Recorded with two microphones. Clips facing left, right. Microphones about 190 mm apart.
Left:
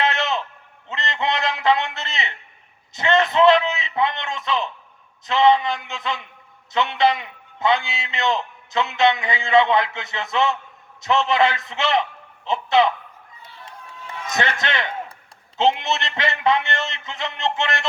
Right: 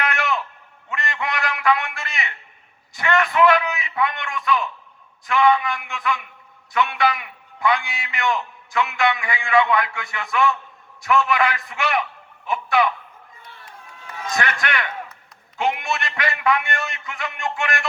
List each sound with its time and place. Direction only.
0.0 s a sound: 25° left (ahead or behind)
5.2 s a man's voice: 25° left (ahead or behind)
14.3 s a man's voice: 25° left (ahead or behind)